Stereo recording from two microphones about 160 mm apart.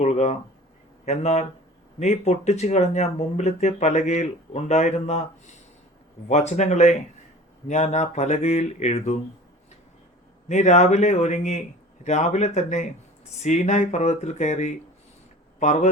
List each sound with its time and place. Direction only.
0.0 s speech: 45° left (ahead or behind)
10.5 s speech: 45° left (ahead or behind)